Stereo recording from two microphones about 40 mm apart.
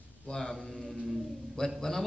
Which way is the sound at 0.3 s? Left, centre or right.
Centre.